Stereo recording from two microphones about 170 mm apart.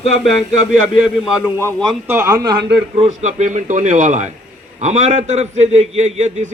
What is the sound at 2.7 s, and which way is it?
A man's voice, 35° right (ahead or behind).